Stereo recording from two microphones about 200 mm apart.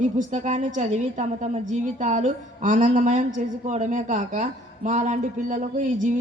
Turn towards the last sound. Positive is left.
turn(degrees=-40)  # may be behind; listen again after turning